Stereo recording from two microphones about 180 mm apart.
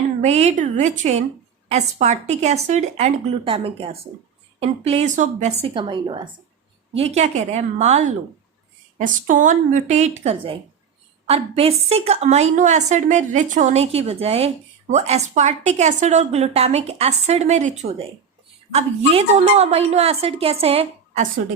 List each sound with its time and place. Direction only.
0.2 s a woman's voice: 35° right (ahead or behind)
6.9 s a woman's voice: 35° right (ahead or behind)